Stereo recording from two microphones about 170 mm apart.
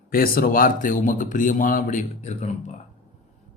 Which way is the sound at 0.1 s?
60° left (ahead or behind).